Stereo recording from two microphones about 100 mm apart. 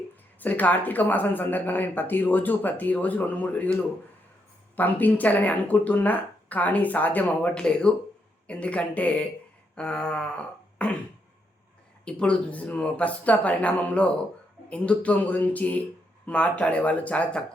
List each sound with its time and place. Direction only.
0.3 s speech: 15° left (ahead or behind)
4.8 s speech: 15° left (ahead or behind)
9.7 s throat clearing: 10° left (ahead or behind)
12.0 s speech: 10° left (ahead or behind)